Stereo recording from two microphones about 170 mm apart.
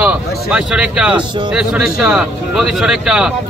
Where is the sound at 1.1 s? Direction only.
25° right (ahead or behind).